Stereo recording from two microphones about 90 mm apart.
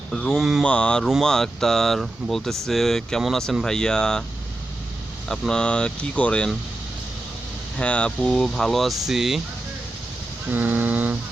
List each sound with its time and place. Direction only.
0.1 s speech: 5° left (ahead or behind)
0.6 s speech: 10° left (ahead or behind)
5.3 s speech: 5° left (ahead or behind)
7.8 s speech: 15° left (ahead or behind); by 9.4 s 5° right (ahead or behind)
10.5 s vehicle: 20° right (ahead or behind)